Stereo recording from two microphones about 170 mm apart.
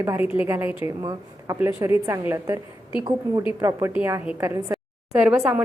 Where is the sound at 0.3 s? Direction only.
15° right (ahead or behind).